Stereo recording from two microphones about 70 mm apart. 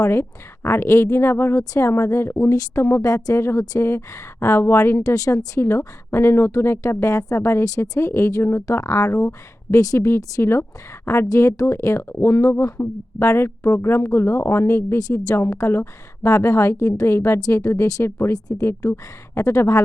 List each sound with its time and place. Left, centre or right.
0.0 s a woman's voice: left
3.0 s a woman's voice: left
9.7 s speech: left
10.4 s a woman's voice: left
11.3 s a woman's voice: left
16.2 s a woman's voice: left